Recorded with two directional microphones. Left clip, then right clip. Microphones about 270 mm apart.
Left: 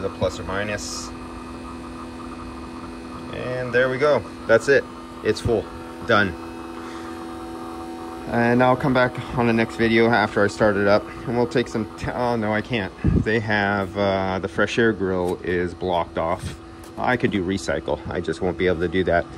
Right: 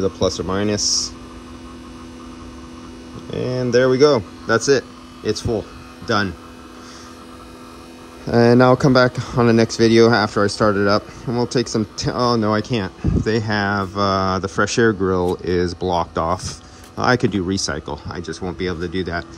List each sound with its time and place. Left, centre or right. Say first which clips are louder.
0.2 s speech: right 5 dB; right
3.3 s speech: right 4 dB; right
8.4 s speech: right 5 dB; centre
17.1 s speech: right 3 dB; centre